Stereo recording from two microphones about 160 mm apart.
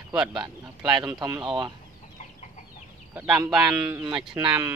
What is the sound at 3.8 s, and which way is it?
Speech, 25° right (ahead or behind).